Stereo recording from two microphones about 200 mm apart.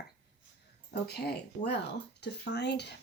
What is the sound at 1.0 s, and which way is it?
Speech, 50° left (ahead or behind).